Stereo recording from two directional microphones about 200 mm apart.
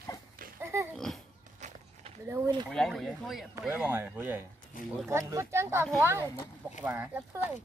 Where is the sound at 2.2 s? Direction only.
20° right (ahead or behind).